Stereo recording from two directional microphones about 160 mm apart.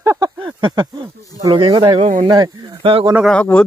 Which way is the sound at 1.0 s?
25° right (ahead or behind).